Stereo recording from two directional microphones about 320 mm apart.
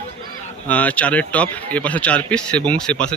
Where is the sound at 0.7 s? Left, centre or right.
Centre.